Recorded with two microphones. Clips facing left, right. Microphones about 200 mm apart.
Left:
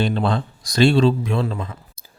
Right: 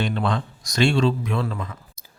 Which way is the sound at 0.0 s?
30° left (ahead or behind).